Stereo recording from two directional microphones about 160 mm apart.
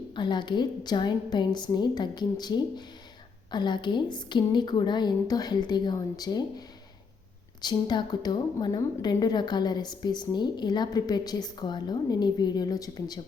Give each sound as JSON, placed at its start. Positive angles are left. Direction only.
{"t": 0.1, "sound": "a woman's voice", "side_deg": 30}